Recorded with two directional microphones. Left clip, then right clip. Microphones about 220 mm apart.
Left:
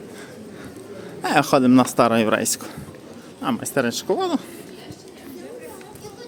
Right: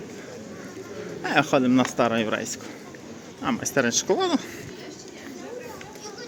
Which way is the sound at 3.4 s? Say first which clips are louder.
Left 1 dB; 15° left (ahead or behind).